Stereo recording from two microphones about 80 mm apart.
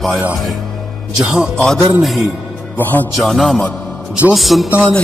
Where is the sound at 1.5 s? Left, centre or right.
Centre.